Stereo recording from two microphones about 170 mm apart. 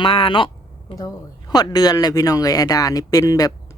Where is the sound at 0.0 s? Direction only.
30° left (ahead or behind).